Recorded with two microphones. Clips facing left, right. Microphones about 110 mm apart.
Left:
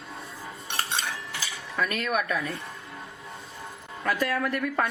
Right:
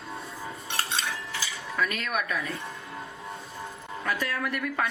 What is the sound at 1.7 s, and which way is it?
Speech, 40° left (ahead or behind).